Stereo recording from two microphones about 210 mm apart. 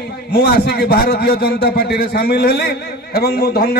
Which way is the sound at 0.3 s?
50° left (ahead or behind).